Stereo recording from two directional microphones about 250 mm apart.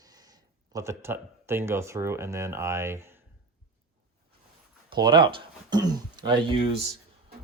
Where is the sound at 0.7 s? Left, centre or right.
Centre.